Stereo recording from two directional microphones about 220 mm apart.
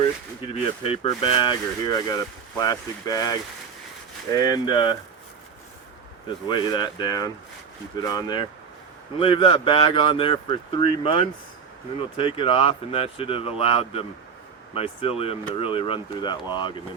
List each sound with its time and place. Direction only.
0.0 s speech: 25° left (ahead or behind)
6.5 s speech: 20° left (ahead or behind)